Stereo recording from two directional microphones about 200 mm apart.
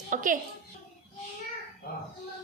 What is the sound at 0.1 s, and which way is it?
Music, 40° right (ahead or behind).